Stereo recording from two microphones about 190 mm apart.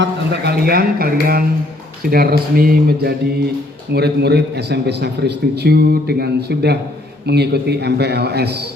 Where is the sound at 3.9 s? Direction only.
60° right (ahead or behind).